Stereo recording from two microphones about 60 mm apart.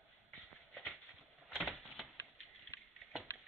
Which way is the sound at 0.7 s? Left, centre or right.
Left.